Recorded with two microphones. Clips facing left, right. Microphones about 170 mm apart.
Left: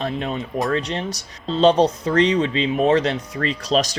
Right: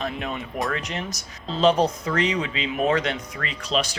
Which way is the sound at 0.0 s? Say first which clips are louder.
Left 4 dB; 30° left (ahead or behind).